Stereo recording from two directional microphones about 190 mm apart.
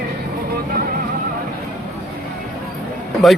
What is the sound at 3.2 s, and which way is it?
Speech, centre (ahead or behind).